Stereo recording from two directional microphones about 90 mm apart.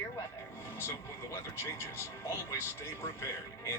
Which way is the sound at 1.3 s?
30° left (ahead or behind).